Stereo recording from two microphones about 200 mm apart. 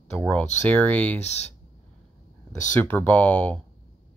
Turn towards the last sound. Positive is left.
turn(degrees=5)  # may be behind; listen again after turning